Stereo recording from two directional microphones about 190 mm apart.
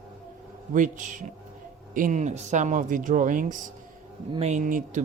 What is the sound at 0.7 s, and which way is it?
Speech, 40° right (ahead or behind).